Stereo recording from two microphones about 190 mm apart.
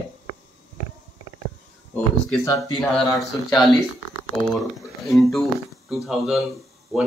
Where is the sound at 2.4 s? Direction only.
15° left (ahead or behind).